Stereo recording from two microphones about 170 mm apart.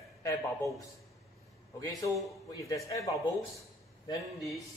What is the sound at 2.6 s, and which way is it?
Speech, 20° left (ahead or behind).